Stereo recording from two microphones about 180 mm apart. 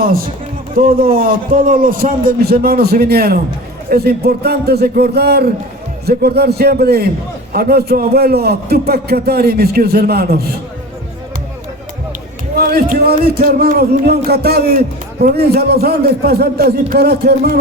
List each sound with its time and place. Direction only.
0.8 s a man's voice: 55° right (ahead or behind)
12.5 s a man's voice: 55° right (ahead or behind)